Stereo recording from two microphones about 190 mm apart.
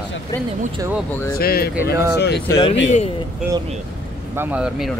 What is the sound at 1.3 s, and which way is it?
Speech, 55° left (ahead or behind).